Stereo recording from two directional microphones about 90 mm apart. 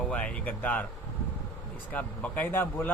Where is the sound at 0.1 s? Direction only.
15° left (ahead or behind).